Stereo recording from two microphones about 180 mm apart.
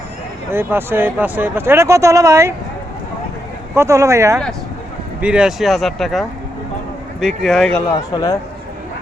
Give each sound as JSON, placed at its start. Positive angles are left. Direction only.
{"t": 0.5, "sound": "speech", "side_deg": -10}
{"t": 3.8, "sound": "speech", "side_deg": -15}
{"t": 5.2, "sound": "speech", "side_deg": -5}
{"t": 7.9, "sound": "a man's voice", "side_deg": 25}